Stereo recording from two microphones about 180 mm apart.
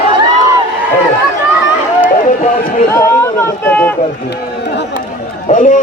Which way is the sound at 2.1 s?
50° left (ahead or behind).